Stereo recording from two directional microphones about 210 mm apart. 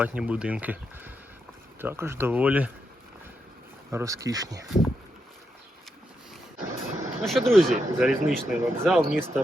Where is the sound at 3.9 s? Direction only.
15° right (ahead or behind).